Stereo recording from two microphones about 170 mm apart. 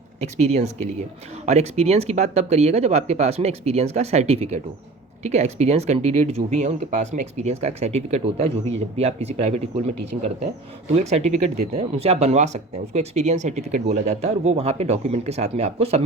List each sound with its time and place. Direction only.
0.2 s speech: 40° right (ahead or behind)